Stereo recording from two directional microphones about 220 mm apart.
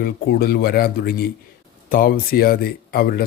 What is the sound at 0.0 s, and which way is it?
Speech, 45° left (ahead or behind).